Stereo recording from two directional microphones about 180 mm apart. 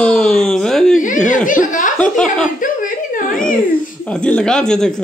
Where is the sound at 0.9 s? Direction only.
45° left (ahead or behind).